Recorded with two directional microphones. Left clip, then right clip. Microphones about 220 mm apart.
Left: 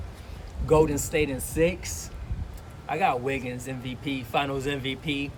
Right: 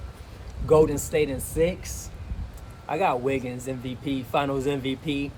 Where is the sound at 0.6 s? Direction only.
5° right (ahead or behind).